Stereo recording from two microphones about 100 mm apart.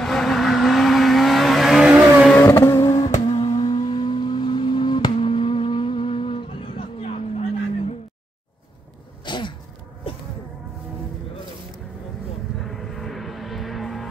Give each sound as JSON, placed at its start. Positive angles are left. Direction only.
{"t": 0.0, "sound": "vehicle", "side_deg": 5}
{"t": 1.9, "sound": "vehicle", "side_deg": -15}
{"t": 2.3, "sound": "vehicle", "side_deg": 25}
{"t": 3.3, "sound": "vehicle", "side_deg": 45}
{"t": 5.1, "sound": "a sound", "side_deg": 55}
{"t": 9.2, "sound": "a sound", "side_deg": 50}
{"t": 12.6, "sound": "vehicle", "side_deg": 0}